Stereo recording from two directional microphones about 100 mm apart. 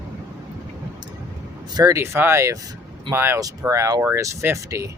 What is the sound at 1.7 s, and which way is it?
Speech, 40° right (ahead or behind).